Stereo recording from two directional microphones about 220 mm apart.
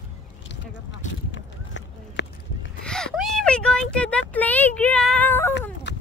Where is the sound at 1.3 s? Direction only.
55° left (ahead or behind).